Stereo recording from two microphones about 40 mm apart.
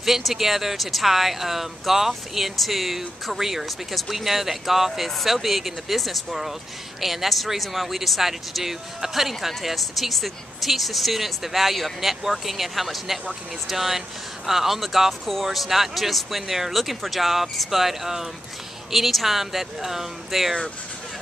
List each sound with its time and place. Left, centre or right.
0.0 s speech: centre